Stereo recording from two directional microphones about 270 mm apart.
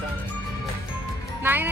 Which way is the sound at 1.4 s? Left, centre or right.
Centre.